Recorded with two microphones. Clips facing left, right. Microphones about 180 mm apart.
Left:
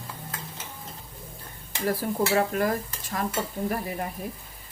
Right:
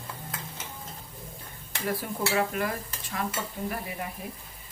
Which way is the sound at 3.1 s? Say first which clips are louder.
Left 4 dB; 45° left (ahead or behind).